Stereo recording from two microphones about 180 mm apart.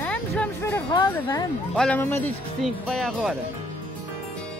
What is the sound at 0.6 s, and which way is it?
Music, 20° left (ahead or behind).